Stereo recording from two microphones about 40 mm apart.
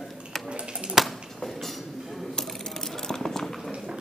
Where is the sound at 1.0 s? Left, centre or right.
Centre.